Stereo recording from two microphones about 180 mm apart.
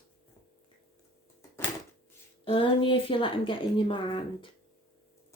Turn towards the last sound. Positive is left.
turn(degrees=25)  # may be behind; listen again after turning